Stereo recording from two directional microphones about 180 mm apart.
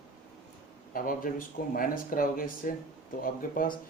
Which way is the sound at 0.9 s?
50° left (ahead or behind).